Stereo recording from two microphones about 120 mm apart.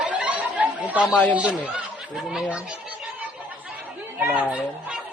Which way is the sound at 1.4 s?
10° right (ahead or behind).